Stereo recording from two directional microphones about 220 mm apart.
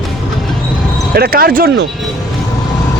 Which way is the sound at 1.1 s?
45° right (ahead or behind).